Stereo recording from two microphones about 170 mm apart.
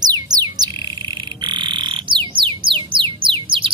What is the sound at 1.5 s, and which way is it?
Frog, 25° right (ahead or behind).